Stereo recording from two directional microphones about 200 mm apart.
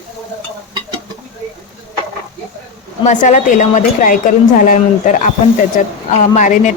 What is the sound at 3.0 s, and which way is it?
Speech, 40° left (ahead or behind).